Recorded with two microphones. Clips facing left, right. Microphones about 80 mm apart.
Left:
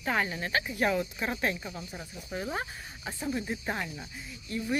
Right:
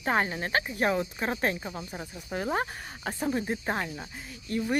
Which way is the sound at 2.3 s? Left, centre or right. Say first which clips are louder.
Right 5 dB; right.